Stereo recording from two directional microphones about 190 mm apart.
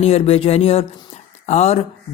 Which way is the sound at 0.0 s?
30° left (ahead or behind).